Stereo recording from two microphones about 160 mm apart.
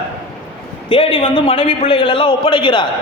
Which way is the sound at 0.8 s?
30° left (ahead or behind).